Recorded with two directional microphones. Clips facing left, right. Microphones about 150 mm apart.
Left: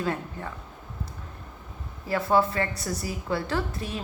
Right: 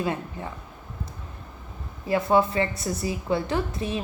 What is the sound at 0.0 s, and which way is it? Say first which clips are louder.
Speech: right 1 dB; 15° right (ahead or behind).